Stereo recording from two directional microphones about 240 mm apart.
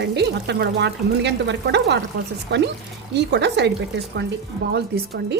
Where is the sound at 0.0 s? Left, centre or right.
Right.